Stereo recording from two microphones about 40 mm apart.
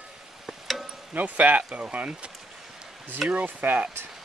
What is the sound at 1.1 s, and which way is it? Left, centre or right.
Speech, right.